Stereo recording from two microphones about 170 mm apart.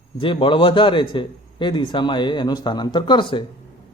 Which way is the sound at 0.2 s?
30° left (ahead or behind).